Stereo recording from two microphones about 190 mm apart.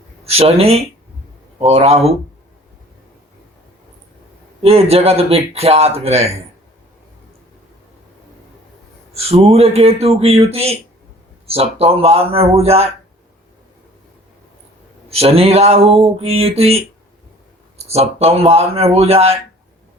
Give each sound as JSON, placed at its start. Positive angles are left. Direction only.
{"t": 0.3, "sound": "speech", "side_deg": -30}
{"t": 4.6, "sound": "speech", "side_deg": -35}
{"t": 9.2, "sound": "speech", "side_deg": -30}
{"t": 15.1, "sound": "speech", "side_deg": -30}